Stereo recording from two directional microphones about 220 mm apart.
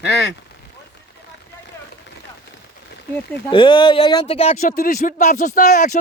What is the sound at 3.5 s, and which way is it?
Speech, 20° left (ahead or behind).